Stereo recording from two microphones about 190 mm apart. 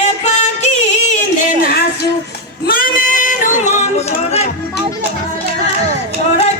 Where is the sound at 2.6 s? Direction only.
50° left (ahead or behind).